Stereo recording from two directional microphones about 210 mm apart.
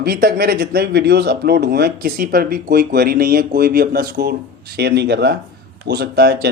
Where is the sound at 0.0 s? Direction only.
50° right (ahead or behind).